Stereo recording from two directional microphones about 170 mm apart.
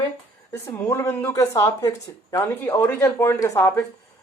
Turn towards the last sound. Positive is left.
turn(degrees=15)  # may be behind; listen again after turning